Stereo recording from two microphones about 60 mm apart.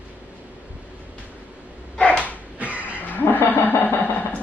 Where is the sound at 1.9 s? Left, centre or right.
Centre.